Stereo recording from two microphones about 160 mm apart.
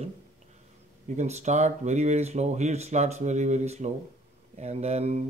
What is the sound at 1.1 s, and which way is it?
Speech, 45° right (ahead or behind).